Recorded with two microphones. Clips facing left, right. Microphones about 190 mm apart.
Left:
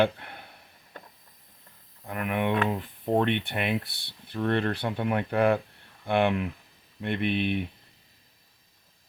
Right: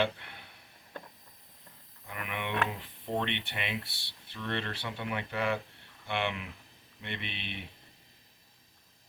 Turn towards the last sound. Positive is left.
turn(degrees=50)  # may be behind; listen again after turning